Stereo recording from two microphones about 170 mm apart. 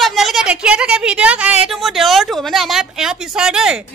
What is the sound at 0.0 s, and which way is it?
A woman's voice, centre (ahead or behind).